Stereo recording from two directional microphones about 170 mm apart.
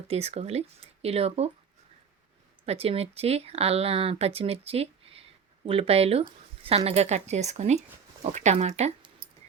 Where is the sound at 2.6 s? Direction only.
35° right (ahead or behind).